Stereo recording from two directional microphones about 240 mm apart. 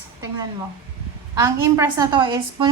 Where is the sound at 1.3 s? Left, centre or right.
Centre.